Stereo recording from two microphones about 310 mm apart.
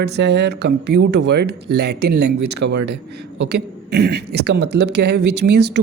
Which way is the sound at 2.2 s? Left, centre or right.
Right.